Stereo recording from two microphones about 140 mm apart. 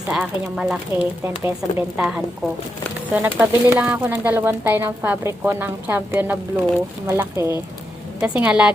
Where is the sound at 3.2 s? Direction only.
15° right (ahead or behind).